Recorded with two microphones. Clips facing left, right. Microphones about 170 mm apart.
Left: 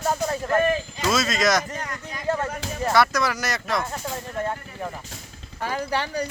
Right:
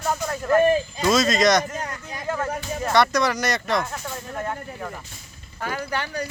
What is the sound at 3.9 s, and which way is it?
Snake, 20° left (ahead or behind).